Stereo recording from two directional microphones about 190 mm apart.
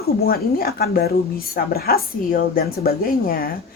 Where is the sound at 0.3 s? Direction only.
50° left (ahead or behind).